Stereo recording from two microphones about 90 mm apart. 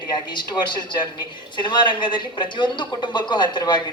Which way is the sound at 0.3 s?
60° left (ahead or behind).